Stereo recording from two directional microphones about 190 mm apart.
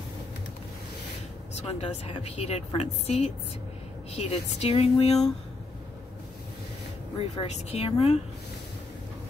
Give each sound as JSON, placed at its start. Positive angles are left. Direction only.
{"t": 1.5, "sound": "a woman's voice", "side_deg": 30}
{"t": 7.2, "sound": "a woman's voice", "side_deg": 35}